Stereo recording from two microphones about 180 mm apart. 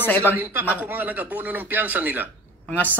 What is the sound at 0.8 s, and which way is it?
A man's voice, 10° right (ahead or behind).